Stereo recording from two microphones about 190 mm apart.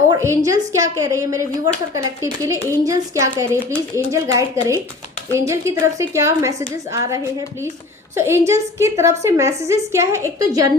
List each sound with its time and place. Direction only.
0.1 s a woman's voice: 15° right (ahead or behind)